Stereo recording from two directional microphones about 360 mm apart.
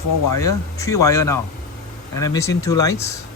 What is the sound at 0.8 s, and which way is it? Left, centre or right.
Speech, centre.